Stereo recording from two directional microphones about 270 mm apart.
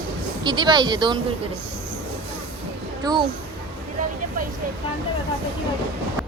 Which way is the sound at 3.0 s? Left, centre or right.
Centre.